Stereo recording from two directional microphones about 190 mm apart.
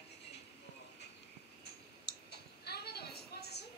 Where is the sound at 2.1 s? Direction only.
60° left (ahead or behind).